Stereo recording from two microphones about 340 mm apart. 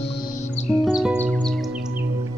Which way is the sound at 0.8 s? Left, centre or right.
Centre.